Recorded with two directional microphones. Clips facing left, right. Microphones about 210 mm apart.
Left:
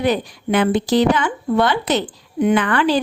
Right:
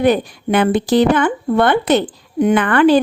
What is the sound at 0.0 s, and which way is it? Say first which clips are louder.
Speech: right 5 dB; 55° right (ahead or behind).